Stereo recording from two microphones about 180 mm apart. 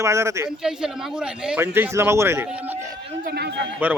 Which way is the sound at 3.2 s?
60° right (ahead or behind).